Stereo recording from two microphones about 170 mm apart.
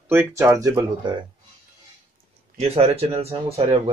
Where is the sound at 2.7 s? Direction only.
35° right (ahead or behind).